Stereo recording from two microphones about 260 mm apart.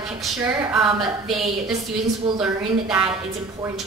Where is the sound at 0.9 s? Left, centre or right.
Centre.